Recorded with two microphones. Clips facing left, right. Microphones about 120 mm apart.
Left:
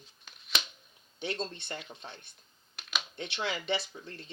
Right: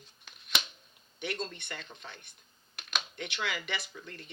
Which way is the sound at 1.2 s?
30° left (ahead or behind).